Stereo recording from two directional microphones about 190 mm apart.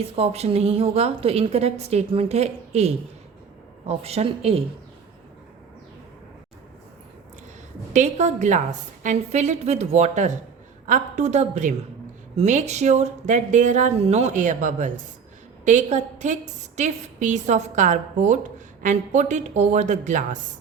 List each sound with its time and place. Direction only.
0.0 s a woman's voice: 30° right (ahead or behind)
7.9 s a woman's voice: 40° right (ahead or behind)